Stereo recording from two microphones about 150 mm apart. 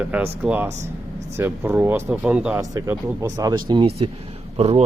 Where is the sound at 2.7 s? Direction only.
25° right (ahead or behind).